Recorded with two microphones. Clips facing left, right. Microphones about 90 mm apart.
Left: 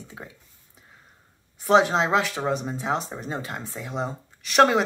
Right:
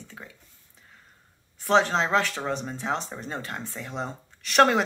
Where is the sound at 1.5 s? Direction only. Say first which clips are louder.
Left 3 dB; 10° left (ahead or behind).